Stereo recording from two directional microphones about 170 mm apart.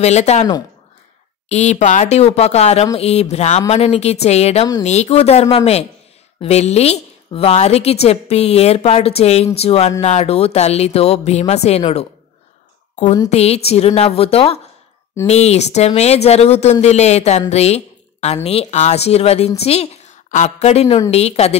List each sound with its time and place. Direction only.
0.0 s a woman's voice: 40° left (ahead or behind)
1.5 s a woman's voice: 40° left (ahead or behind)
13.3 s a woman's voice: 35° left (ahead or behind)